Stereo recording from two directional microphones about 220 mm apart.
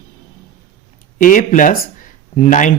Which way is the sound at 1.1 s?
35° left (ahead or behind).